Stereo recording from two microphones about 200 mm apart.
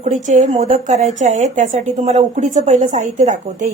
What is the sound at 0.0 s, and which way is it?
A woman's voice, 35° right (ahead or behind).